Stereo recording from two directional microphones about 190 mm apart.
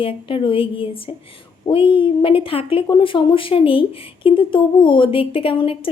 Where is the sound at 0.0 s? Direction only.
25° left (ahead or behind).